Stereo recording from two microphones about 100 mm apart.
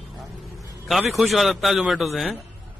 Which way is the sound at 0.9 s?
Centre (ahead or behind).